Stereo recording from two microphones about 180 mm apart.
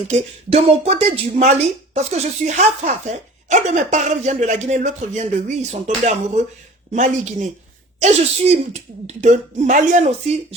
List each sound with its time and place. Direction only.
0.1 s speech: 35° right (ahead or behind)